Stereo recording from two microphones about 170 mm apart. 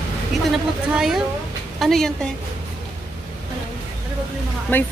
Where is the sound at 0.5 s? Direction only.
Centre (ahead or behind).